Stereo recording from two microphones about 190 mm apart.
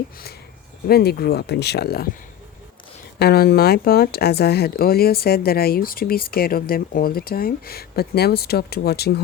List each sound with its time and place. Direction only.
0.9 s speech: 55° left (ahead or behind)
3.2 s speech: 55° left (ahead or behind)